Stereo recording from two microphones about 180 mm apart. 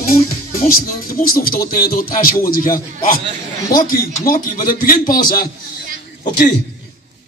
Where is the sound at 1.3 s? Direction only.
55° left (ahead or behind).